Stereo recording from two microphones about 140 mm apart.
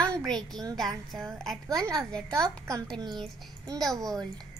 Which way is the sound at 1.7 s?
25° right (ahead or behind).